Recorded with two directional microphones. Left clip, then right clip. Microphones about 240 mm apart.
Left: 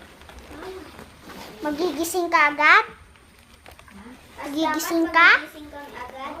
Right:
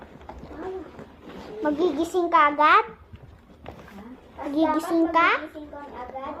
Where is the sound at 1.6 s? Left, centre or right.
Left.